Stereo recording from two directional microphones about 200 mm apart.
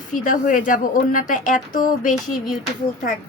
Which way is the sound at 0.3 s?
40° left (ahead or behind).